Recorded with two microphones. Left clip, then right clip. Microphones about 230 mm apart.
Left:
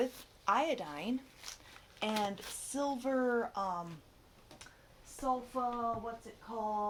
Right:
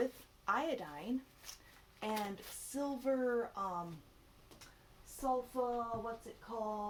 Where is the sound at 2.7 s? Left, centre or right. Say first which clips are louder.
Left 3 dB; left.